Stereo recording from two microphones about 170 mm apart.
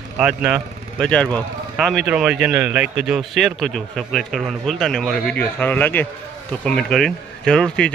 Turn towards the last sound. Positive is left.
turn(degrees=5)  # may be behind; listen again after turning